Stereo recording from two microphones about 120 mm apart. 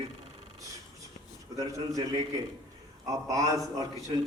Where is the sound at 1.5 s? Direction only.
30° right (ahead or behind).